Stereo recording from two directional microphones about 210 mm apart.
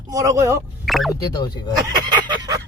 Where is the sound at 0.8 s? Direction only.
Centre (ahead or behind).